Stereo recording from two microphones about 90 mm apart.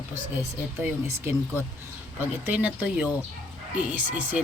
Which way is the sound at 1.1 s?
30° right (ahead or behind).